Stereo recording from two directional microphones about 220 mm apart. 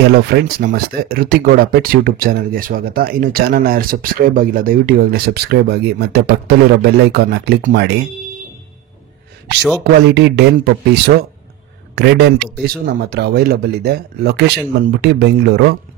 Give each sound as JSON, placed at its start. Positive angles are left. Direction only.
{"t": 0.1, "sound": "speech", "side_deg": -45}
{"t": 10.1, "sound": "speech", "side_deg": -50}